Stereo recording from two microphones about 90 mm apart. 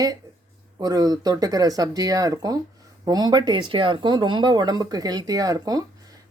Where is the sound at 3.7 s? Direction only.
65° right (ahead or behind).